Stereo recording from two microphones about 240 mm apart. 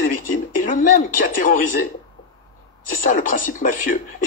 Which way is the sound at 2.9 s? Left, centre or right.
Left.